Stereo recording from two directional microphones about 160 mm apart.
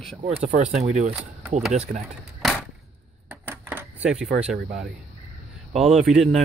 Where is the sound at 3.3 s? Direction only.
10° right (ahead or behind).